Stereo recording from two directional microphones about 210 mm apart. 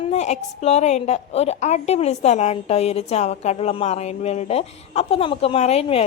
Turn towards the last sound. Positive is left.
turn(degrees=30)  # may be behind; listen again after turning